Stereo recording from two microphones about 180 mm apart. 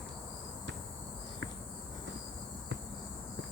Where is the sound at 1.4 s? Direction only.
80° right.